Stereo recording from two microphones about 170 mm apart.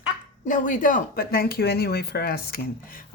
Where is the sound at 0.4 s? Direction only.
50° left (ahead or behind).